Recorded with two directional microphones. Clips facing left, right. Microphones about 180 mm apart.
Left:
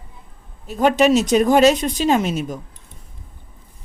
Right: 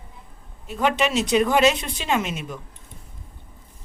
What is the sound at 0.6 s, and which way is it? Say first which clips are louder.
Speech: left 7 dB; 40° left (ahead or behind).